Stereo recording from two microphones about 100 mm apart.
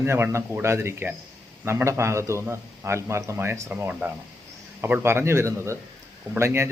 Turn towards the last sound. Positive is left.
turn(degrees=-25)  # may be behind; listen again after turning